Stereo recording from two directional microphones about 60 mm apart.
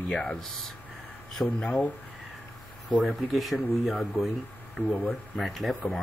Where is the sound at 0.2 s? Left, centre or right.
Centre.